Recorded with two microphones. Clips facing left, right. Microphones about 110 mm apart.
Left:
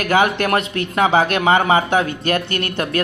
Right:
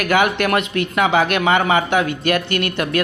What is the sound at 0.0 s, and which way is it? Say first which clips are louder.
Speech: even; 35° left (ahead or behind).